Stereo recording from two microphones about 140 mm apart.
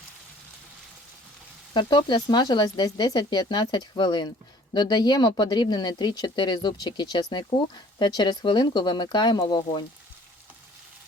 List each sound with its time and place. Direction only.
1.7 s speech: 35° left (ahead or behind)